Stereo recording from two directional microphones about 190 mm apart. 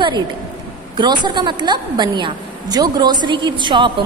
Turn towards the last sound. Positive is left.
turn(degrees=-25)  # may be behind; listen again after turning